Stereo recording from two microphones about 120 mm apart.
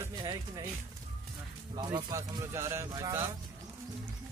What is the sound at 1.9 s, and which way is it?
Speech, 30° right (ahead or behind).